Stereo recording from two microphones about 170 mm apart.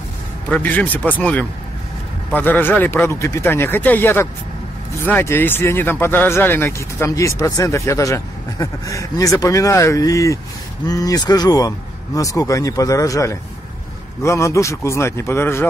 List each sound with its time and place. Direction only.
0.5 s speech: 10° left (ahead or behind)